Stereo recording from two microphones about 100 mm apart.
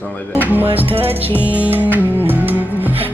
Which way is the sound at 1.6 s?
20° right (ahead or behind).